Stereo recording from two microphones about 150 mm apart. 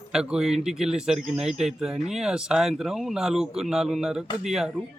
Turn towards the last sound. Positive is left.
turn(degrees=-5)  # may be behind; listen again after turning